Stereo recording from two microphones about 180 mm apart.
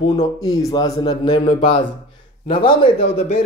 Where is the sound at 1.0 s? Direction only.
30° left (ahead or behind).